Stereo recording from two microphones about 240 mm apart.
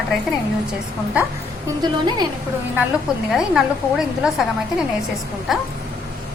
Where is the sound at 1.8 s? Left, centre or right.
Centre.